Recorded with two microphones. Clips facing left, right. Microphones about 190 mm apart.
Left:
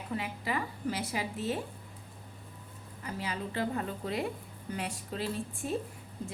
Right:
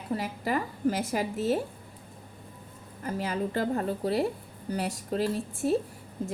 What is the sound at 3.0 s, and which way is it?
A woman's voice, 45° right (ahead or behind).